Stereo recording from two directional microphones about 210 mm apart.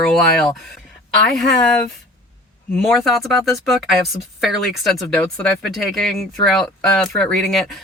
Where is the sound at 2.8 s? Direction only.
Centre (ahead or behind).